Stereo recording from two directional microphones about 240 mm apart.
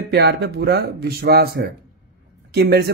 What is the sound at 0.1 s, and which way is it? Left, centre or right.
Speech, right.